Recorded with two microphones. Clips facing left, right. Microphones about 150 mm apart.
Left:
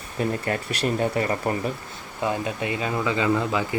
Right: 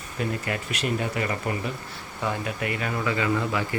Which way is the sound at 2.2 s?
20° left (ahead or behind).